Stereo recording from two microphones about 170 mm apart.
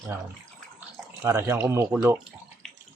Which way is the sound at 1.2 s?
15° right (ahead or behind).